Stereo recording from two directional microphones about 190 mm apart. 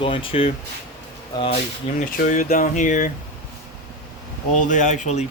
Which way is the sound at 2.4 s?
45° left (ahead or behind).